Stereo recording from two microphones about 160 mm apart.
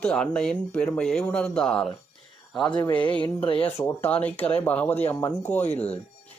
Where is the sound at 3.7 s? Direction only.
15° left (ahead or behind).